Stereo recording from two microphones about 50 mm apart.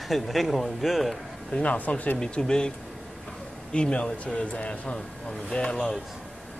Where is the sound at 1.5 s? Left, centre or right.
Left.